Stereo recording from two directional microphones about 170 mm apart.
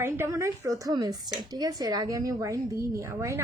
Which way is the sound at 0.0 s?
15° right (ahead or behind).